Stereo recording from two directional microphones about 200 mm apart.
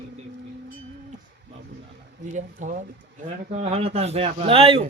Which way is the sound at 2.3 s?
40° right (ahead or behind).